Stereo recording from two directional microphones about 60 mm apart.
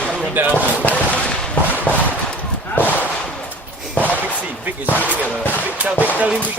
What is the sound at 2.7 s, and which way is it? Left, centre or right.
Whip, left.